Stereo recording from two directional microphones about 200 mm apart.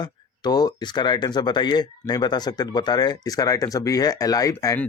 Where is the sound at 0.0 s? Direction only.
20° left (ahead or behind).